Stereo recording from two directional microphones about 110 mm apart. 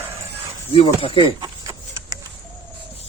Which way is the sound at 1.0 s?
55° left (ahead or behind).